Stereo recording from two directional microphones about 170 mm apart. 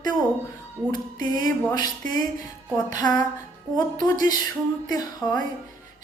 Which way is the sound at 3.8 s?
20° left (ahead or behind).